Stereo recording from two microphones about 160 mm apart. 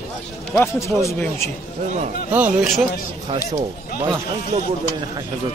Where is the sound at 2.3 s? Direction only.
10° right (ahead or behind).